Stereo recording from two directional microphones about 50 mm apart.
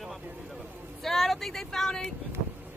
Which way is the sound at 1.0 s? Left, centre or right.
Centre.